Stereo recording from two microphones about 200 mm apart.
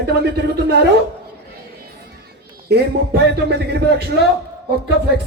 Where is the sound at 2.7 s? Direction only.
55° right (ahead or behind).